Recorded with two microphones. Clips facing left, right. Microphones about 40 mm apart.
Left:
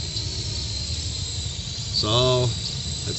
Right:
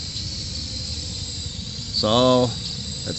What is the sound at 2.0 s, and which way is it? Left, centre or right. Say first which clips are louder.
Speech: right 5 dB; right.